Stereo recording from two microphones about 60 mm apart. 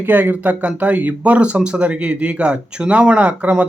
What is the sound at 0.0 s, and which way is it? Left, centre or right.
Speech, right.